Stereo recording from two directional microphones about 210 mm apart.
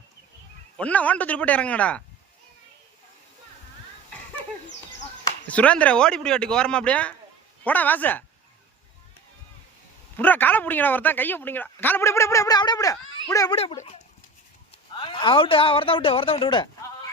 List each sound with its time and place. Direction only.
0.8 s speech: 5° left (ahead or behind)
5.5 s speech: 5° left (ahead or behind)
10.2 s speech: 10° left (ahead or behind)
13.6 s speech: 30° left (ahead or behind)